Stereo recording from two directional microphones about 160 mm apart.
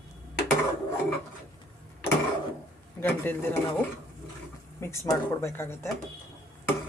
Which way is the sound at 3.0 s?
15° left (ahead or behind).